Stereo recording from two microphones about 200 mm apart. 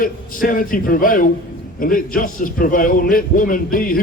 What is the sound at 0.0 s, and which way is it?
A man's voice, 45° left (ahead or behind).